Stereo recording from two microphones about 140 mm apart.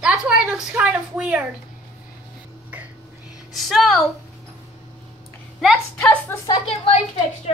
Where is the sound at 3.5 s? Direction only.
Centre (ahead or behind).